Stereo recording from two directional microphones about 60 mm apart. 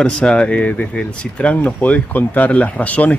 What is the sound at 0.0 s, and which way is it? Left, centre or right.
Speech, centre.